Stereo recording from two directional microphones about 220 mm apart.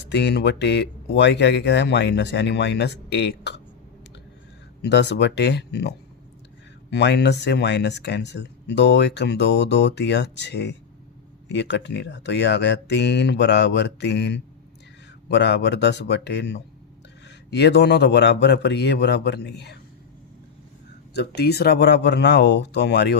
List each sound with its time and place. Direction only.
0.1 s speech: 50° left (ahead or behind)
4.8 s speech: 50° left (ahead or behind)
6.9 s speech: 50° left (ahead or behind)
21.1 s speech: 50° left (ahead or behind)